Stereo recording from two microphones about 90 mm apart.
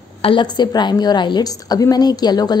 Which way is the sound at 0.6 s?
55° left (ahead or behind).